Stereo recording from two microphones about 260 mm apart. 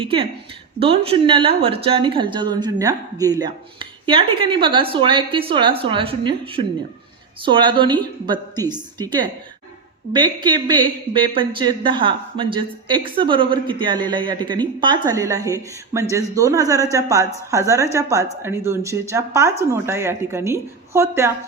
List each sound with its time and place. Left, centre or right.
0.0 s a woman's voice: right